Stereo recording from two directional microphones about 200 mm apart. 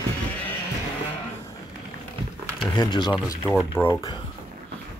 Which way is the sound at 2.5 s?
20° left (ahead or behind).